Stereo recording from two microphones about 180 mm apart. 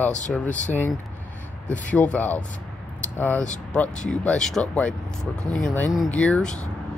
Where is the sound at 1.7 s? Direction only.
10° left (ahead or behind).